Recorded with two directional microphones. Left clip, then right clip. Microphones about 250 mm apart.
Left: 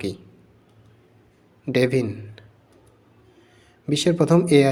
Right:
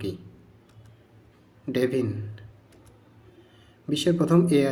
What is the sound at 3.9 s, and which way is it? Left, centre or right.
Speech, left.